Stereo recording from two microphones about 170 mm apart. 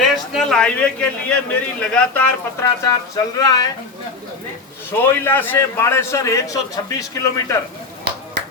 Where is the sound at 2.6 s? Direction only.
20° left (ahead or behind).